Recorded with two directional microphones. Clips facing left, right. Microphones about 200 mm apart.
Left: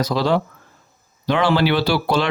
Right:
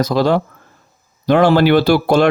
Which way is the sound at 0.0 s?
50° right (ahead or behind).